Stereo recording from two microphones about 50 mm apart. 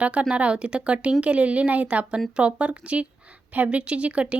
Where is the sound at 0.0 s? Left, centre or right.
Right.